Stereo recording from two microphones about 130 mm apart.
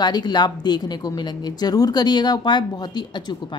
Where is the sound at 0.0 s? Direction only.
35° left (ahead or behind).